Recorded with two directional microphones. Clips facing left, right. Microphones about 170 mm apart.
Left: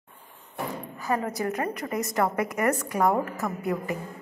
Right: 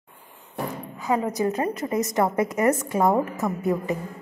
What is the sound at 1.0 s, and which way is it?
A woman's voice, 15° right (ahead or behind).